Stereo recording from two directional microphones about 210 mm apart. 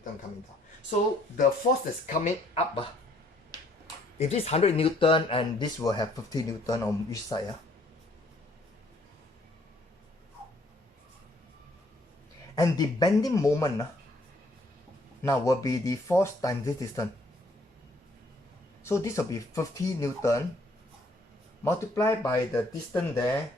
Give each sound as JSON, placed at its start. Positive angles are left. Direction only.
{"t": 2.0, "sound": "speech", "side_deg": 30}
{"t": 4.2, "sound": "speech", "side_deg": 30}
{"t": 12.5, "sound": "speech", "side_deg": 20}
{"t": 15.2, "sound": "speech", "side_deg": 15}
{"t": 18.8, "sound": "speech", "side_deg": 15}
{"t": 21.6, "sound": "speech", "side_deg": 15}